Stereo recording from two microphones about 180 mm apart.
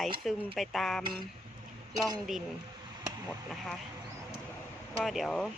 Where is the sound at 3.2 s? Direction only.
Centre (ahead or behind).